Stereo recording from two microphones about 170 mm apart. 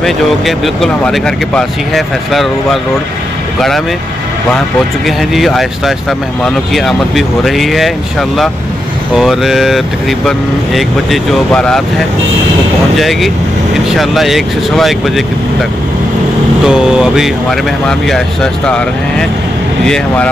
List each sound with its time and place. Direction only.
0.0 s speech: centre (ahead or behind)
5.0 s speech: centre (ahead or behind)
12.9 s speech: centre (ahead or behind)
16.6 s speech: 5° right (ahead or behind)